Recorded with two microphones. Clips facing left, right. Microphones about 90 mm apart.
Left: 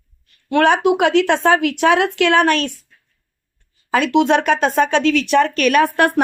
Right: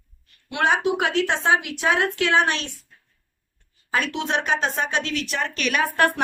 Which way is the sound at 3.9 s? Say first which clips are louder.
Left 10 dB; 90° left.